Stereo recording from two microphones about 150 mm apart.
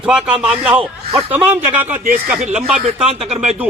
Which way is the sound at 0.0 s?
5° right (ahead or behind).